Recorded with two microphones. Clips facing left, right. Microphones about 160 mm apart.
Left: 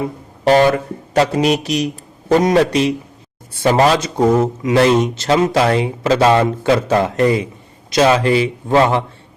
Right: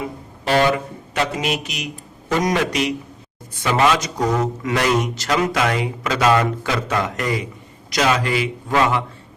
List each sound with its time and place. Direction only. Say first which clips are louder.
1.1 s speech: left 8 dB; 35° left (ahead or behind)